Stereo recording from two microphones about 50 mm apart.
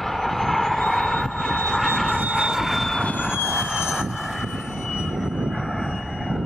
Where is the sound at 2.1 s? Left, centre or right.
Right.